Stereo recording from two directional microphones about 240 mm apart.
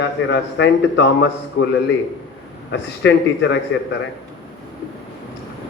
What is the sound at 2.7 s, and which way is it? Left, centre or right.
Speech, left.